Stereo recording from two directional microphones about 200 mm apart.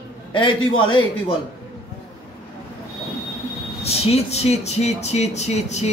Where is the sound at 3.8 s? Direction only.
30° left (ahead or behind).